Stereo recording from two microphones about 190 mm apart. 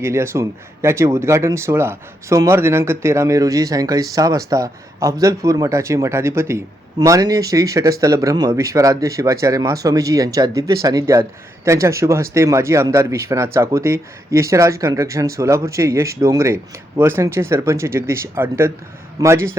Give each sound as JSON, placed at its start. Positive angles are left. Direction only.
{"t": 0.0, "sound": "speech", "side_deg": -15}